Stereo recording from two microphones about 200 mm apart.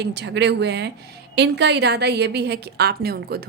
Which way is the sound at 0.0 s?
60° right (ahead or behind).